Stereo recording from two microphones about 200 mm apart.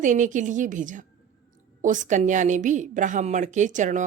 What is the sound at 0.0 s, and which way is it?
A woman's voice, 40° right (ahead or behind).